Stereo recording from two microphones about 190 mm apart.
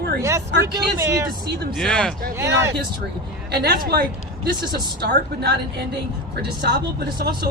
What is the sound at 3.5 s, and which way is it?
Speech, 55° right (ahead or behind).